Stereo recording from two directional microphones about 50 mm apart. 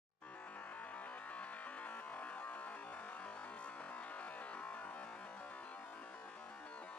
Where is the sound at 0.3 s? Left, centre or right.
Left.